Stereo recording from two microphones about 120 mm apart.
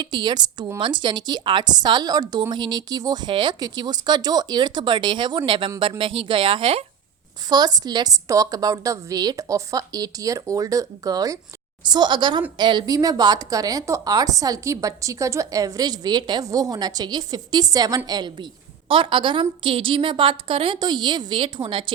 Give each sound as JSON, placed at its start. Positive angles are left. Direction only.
{"t": 0.0, "sound": "a woman's voice", "side_deg": -40}
{"t": 7.5, "sound": "a woman's voice", "side_deg": -35}
{"t": 18.9, "sound": "a woman's voice", "side_deg": -45}